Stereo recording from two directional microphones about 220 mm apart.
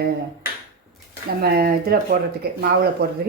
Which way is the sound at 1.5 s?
45° right (ahead or behind).